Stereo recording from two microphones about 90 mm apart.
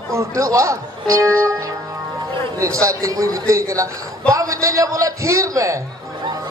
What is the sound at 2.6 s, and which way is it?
Speech, 35° right (ahead or behind).